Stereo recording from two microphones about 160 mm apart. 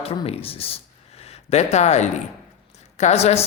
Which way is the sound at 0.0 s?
35° left (ahead or behind).